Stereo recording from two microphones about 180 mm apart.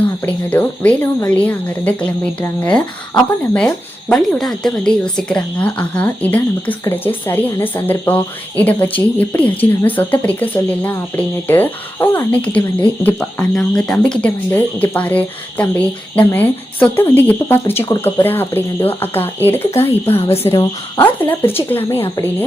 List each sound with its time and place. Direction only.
0.3 s speech: 10° left (ahead or behind)
13.0 s cricket: 5° left (ahead or behind)
13.9 s speech: 5° left (ahead or behind)
20.3 s speech: 35° left (ahead or behind)
20.6 s speech: 15° left (ahead or behind)